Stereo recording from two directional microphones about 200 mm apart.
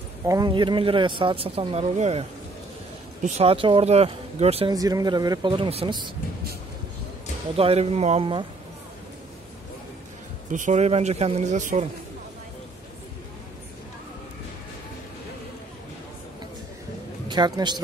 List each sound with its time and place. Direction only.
0.3 s speech: 20° right (ahead or behind)
4.7 s speech: 20° right (ahead or behind)
7.5 s speech: 30° right (ahead or behind)
10.5 s speech: 35° right (ahead or behind)
17.3 s a man's voice: 20° right (ahead or behind)